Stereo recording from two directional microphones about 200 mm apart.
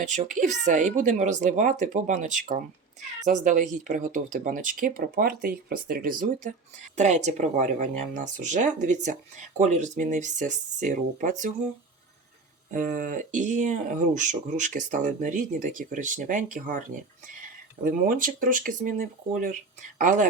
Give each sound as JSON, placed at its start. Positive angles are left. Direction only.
{"t": 0.1, "sound": "speech", "side_deg": -40}
{"t": 12.7, "sound": "speech", "side_deg": -40}
{"t": 17.8, "sound": "speech", "side_deg": -45}